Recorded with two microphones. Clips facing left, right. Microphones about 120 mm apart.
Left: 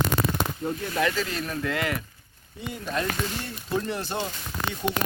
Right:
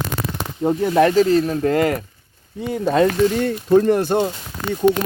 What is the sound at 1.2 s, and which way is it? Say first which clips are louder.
Speech: right 14 dB; 35° right (ahead or behind).